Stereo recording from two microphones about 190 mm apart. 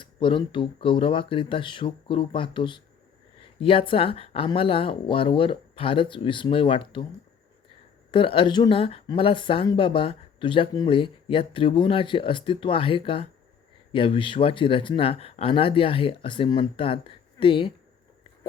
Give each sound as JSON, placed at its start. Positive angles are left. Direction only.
{"t": 0.0, "sound": "speech", "side_deg": 25}
{"t": 8.1, "sound": "speech", "side_deg": 25}